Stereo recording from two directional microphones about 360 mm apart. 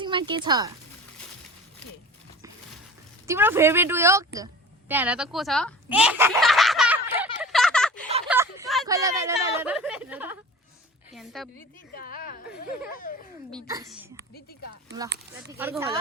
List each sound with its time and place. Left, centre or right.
0.0 s speech: centre
3.2 s speech: centre
4.9 s a sound: centre
11.9 s a sound: left
13.1 s a child's voice: left
13.7 s speech: centre
15.5 s speech: centre